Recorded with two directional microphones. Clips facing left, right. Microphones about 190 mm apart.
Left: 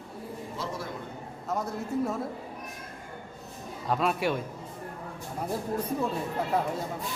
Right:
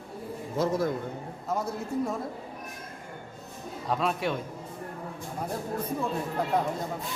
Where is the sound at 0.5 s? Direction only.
45° right (ahead or behind).